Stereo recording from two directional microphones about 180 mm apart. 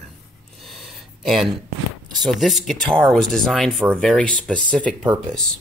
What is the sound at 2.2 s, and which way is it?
Speech, centre (ahead or behind).